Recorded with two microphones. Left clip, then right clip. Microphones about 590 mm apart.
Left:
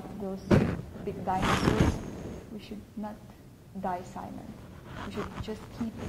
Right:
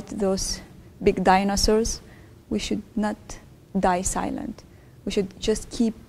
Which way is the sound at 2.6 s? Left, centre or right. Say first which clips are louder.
Right 17 dB; right.